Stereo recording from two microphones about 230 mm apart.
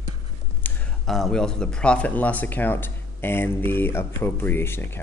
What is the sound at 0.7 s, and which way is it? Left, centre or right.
Speech, centre.